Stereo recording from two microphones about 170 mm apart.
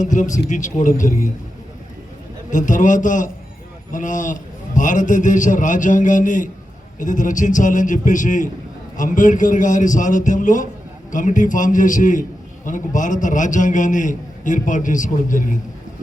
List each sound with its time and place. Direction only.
0.0 s a man's voice: 45° left (ahead or behind)
2.5 s a man's voice: 50° left (ahead or behind)